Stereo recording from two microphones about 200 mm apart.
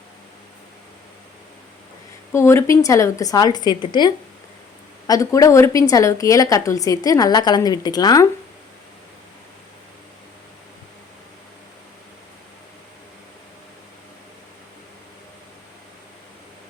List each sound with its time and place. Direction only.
2.3 s speech: 15° left (ahead or behind)